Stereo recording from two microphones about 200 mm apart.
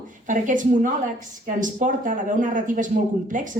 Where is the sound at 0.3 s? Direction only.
40° right (ahead or behind).